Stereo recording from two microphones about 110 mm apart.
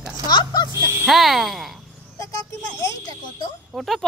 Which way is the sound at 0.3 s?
45° left (ahead or behind).